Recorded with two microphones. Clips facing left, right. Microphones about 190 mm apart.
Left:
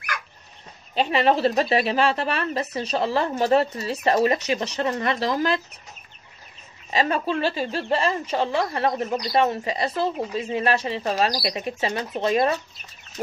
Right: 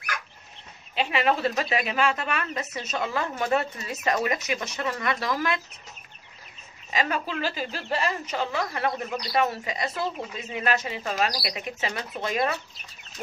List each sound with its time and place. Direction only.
0.9 s speech: 35° left (ahead or behind)
6.9 s a woman's voice: 30° left (ahead or behind)